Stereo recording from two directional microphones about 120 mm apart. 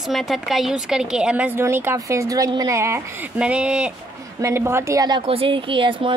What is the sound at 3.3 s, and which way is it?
Speech, 10° right (ahead or behind).